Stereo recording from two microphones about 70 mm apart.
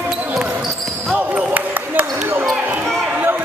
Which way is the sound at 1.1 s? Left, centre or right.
Right.